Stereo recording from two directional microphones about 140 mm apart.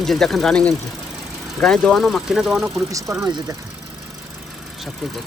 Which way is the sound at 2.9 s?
25° right (ahead or behind).